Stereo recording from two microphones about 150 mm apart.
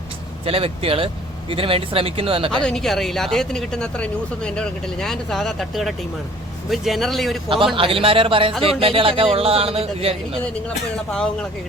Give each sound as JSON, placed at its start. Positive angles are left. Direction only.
{"t": 0.4, "sound": "speech", "side_deg": -40}
{"t": 2.6, "sound": "speech", "side_deg": 5}
{"t": 7.8, "sound": "speech", "side_deg": -35}
{"t": 10.9, "sound": "speech", "side_deg": 5}